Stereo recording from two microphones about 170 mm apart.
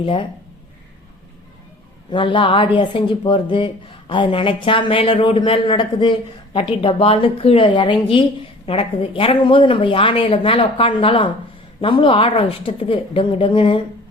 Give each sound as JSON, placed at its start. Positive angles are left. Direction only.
{"t": 0.0, "sound": "a woman's voice", "side_deg": 30}
{"t": 2.0, "sound": "a woman's voice", "side_deg": 30}